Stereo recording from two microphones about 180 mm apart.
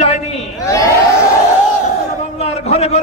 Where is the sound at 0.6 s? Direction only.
20° left (ahead or behind).